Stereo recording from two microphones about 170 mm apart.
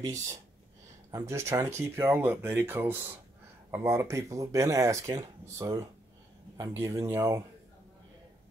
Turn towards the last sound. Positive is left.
turn(degrees=-15)  # may be behind; listen again after turning